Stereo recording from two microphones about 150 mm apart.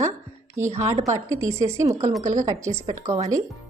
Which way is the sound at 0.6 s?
15° right (ahead or behind).